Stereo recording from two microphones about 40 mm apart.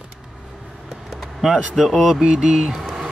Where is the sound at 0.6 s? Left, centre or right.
Centre.